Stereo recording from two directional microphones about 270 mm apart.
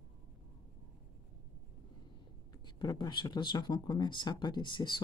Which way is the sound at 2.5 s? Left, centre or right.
Centre.